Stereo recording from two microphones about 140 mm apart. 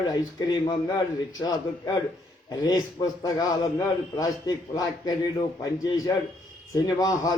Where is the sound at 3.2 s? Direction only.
25° left (ahead or behind).